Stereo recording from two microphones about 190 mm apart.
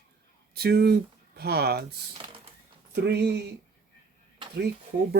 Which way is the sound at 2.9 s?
60° right (ahead or behind).